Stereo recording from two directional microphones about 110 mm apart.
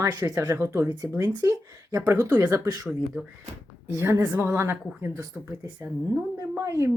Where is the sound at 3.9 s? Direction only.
25° right (ahead or behind).